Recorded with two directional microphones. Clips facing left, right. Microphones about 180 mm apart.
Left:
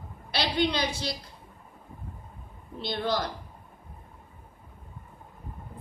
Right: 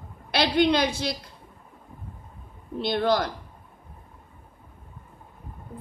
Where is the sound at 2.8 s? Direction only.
60° right (ahead or behind).